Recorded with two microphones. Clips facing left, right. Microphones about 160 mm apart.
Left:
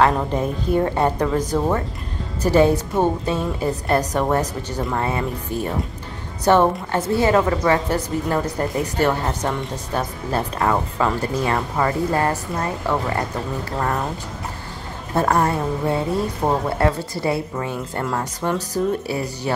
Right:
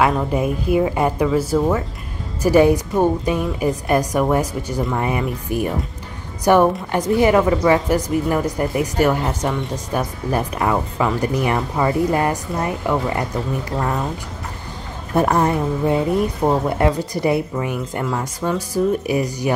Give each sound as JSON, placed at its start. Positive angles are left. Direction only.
{"t": 0.0, "sound": "a woman's voice", "side_deg": -10}
{"t": 15.1, "sound": "speech", "side_deg": -15}
{"t": 18.4, "sound": "speech", "side_deg": 15}
{"t": 19.0, "sound": "speech", "side_deg": -15}